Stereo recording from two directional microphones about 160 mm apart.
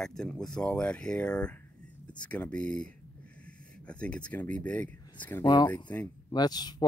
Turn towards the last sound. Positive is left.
turn(degrees=25)  # may be behind; listen again after turning